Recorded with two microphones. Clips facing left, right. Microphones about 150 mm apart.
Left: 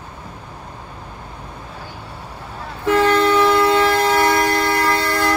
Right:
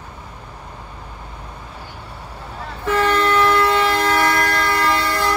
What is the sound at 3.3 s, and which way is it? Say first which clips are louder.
Train: left 2 dB; 25° left (ahead or behind).